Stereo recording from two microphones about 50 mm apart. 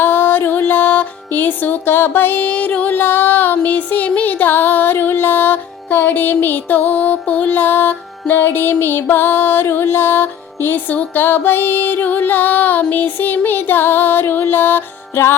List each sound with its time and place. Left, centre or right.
0.0 s music: left
2.9 s a sound: left
4.5 s music: left